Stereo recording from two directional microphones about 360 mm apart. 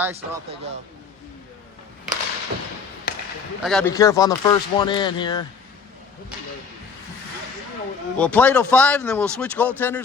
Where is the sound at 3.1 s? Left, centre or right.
Left.